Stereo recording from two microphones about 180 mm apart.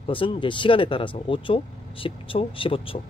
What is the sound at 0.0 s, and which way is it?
Speech, 30° left (ahead or behind).